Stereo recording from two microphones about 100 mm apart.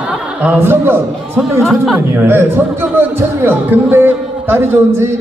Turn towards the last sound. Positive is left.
turn(degrees=-25)  # may be behind; listen again after turning